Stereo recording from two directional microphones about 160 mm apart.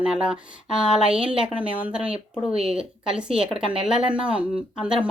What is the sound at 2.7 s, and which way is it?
Speech, 5° right (ahead or behind).